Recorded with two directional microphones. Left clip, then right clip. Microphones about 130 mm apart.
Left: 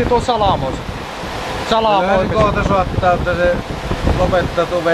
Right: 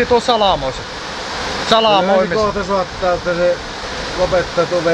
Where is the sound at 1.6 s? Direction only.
Centre (ahead or behind).